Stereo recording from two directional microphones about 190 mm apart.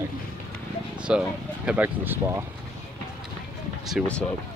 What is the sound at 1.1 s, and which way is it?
Speech, 5° right (ahead or behind).